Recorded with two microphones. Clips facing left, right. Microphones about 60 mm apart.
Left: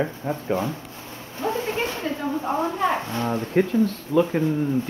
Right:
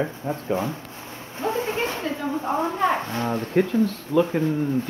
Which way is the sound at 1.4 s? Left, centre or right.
Right.